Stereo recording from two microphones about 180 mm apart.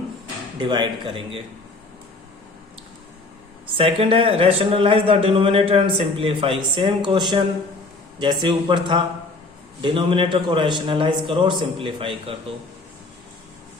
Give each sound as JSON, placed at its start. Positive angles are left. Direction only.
{"t": 0.6, "sound": "a man's voice", "side_deg": -25}
{"t": 3.8, "sound": "a man's voice", "side_deg": -30}